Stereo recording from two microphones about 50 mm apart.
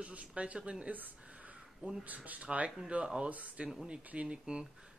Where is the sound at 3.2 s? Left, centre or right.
Right.